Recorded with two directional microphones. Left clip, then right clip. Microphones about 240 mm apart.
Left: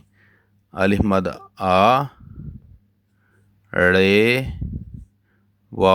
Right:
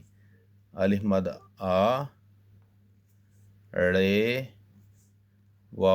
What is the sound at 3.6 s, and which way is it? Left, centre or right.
Speech, left.